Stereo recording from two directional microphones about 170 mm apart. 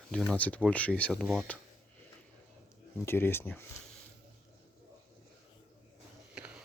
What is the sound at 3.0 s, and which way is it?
Speech, 15° left (ahead or behind).